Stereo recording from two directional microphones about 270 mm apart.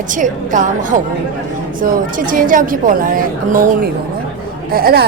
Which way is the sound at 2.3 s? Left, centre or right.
Right.